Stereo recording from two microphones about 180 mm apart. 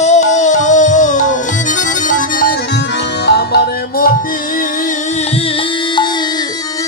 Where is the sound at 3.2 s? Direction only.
65° left (ahead or behind).